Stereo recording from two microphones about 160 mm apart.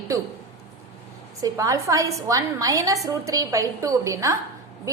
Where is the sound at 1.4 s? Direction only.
20° right (ahead or behind).